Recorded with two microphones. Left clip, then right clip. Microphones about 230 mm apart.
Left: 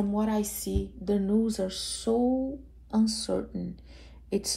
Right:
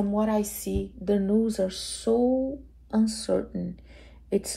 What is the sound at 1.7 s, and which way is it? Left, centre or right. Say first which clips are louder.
Speech: right 3 dB; centre.